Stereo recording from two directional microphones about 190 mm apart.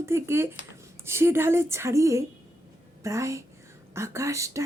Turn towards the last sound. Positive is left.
turn(degrees=-15)  # may be behind; listen again after turning